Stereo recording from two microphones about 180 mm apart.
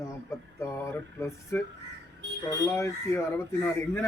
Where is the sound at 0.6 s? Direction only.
15° left (ahead or behind).